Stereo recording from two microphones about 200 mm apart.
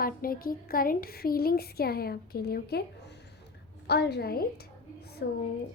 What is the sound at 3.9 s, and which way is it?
A woman's voice, 55° left (ahead or behind).